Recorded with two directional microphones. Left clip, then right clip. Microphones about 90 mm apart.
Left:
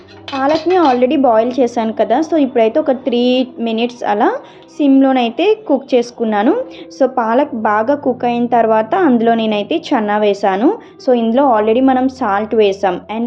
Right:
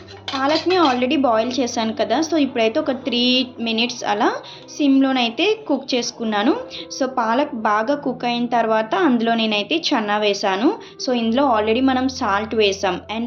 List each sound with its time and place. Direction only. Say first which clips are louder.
0.3 s a woman's voice: left 5 dB; 25° left (ahead or behind)
6.2 s a woman's voice: left 6 dB; 30° left (ahead or behind)
7.0 s a woman's voice: left 6 dB; 45° left (ahead or behind)